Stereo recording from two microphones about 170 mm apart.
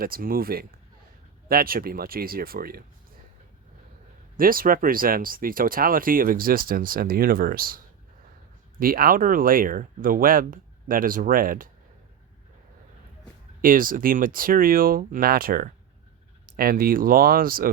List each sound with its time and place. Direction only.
0.0 s speech: 60° right (ahead or behind)
4.4 s speech: 55° right (ahead or behind)
8.8 s speech: 60° right (ahead or behind)
13.6 s speech: 55° right (ahead or behind)